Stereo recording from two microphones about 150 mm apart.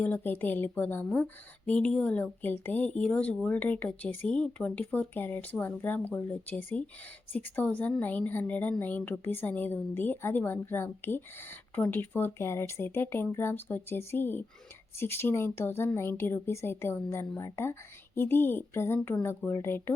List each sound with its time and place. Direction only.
0.0 s a woman's voice: 10° left (ahead or behind)
19.5 s a woman's voice: 15° left (ahead or behind)